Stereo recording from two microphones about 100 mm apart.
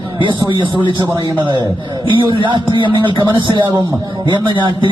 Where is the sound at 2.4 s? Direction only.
55° right (ahead or behind).